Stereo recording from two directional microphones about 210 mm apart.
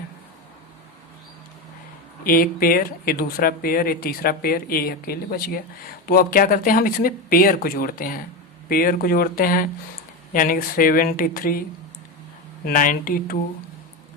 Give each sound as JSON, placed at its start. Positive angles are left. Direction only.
{"t": 2.2, "sound": "speech", "side_deg": 45}
{"t": 12.6, "sound": "speech", "side_deg": 40}